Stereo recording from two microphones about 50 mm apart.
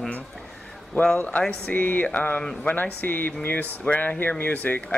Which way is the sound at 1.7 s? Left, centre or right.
Left.